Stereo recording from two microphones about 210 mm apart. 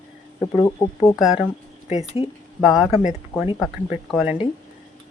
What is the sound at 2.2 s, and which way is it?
Speech, 25° left (ahead or behind).